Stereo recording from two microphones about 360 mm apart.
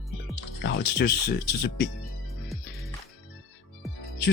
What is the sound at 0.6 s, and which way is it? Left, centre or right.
Speech, left.